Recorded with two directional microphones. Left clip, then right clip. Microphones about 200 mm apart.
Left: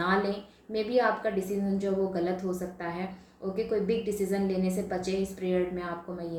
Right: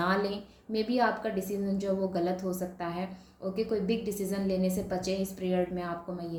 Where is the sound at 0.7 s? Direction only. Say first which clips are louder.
Left 2 dB; 50° right (ahead or behind).